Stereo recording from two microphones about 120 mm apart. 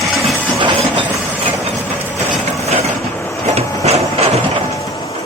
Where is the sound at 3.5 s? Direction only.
60° right (ahead or behind).